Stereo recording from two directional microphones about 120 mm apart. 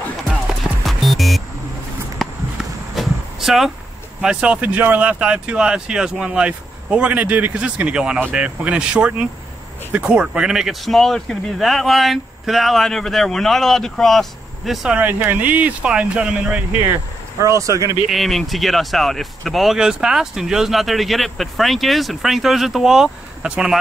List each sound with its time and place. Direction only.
0.8 s music: centre (ahead or behind)
2.9 s a sound: centre (ahead or behind)
4.2 s speech: 5° right (ahead or behind)
17.4 s speech: 25° right (ahead or behind)
18.1 s speech: centre (ahead or behind)